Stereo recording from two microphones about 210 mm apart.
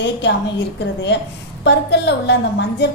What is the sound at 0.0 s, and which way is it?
Speech, 55° left (ahead or behind).